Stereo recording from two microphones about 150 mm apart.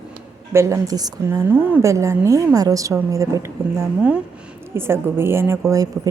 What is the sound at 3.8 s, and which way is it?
A woman's voice, 10° right (ahead or behind).